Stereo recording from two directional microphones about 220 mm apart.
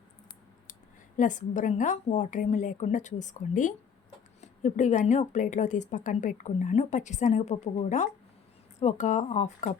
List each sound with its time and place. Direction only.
0.7 s a woman's voice: 35° left (ahead or behind)